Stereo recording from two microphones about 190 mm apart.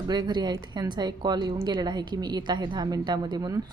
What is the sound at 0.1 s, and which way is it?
A woman's voice, 20° right (ahead or behind).